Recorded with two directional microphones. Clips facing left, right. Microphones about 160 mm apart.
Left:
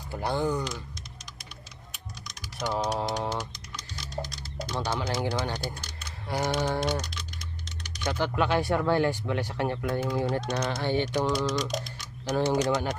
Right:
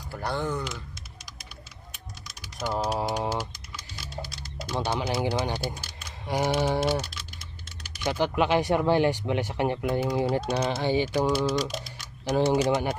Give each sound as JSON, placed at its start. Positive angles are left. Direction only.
{"t": 0.1, "sound": "speech", "side_deg": 15}
{"t": 2.6, "sound": "speech", "side_deg": -5}
{"t": 6.1, "sound": "typing", "side_deg": -15}
{"t": 7.9, "sound": "speech", "side_deg": -10}
{"t": 10.7, "sound": "speech", "side_deg": -25}
{"t": 10.9, "sound": "speech", "side_deg": -10}